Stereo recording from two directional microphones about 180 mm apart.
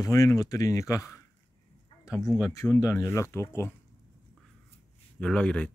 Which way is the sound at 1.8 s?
20° left (ahead or behind).